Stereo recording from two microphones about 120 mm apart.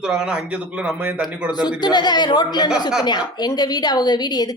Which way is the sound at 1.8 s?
35° left (ahead or behind).